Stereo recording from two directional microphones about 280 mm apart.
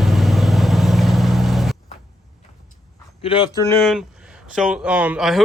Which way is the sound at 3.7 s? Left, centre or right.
Centre.